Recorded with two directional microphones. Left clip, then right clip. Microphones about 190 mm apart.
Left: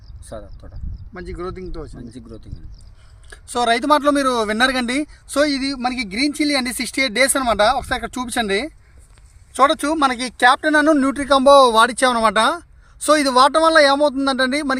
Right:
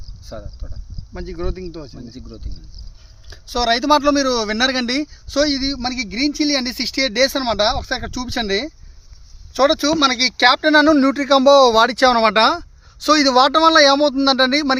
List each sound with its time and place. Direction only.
0.3 s speech: 5° right (ahead or behind)
1.1 s speech: 35° right (ahead or behind)
1.9 s speech: 5° right (ahead or behind)
3.5 s speech: 15° right (ahead or behind); by 8.7 s centre (ahead or behind)
9.6 s speech: 25° right (ahead or behind); by 14.8 s 45° right (ahead or behind)